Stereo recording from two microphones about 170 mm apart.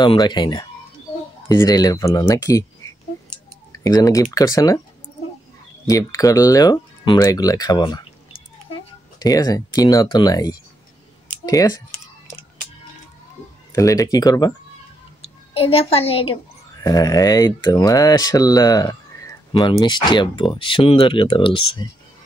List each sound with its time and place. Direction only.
0.0 s speech: 25° left (ahead or behind)
3.7 s speech: 20° left (ahead or behind)
5.9 s speech: 20° left (ahead or behind)
13.7 s speech: 20° left (ahead or behind)
15.5 s a child's voice: 35° left (ahead or behind)
16.8 s speech: 20° left (ahead or behind)